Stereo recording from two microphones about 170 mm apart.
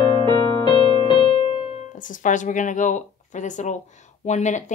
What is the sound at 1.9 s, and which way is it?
Speech, 50° left (ahead or behind).